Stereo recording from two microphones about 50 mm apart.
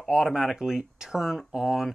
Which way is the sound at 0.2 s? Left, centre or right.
Centre.